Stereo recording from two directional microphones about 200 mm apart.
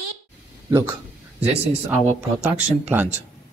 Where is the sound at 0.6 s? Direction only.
15° right (ahead or behind).